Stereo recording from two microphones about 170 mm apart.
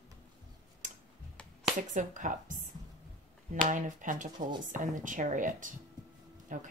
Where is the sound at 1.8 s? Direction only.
50° right (ahead or behind).